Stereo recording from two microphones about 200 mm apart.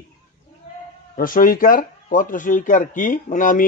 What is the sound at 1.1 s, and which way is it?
Speech, 45° left (ahead or behind).